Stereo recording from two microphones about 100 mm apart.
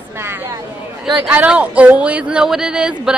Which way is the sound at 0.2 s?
25° right (ahead or behind).